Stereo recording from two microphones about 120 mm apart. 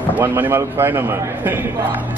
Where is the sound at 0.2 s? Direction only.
20° right (ahead or behind).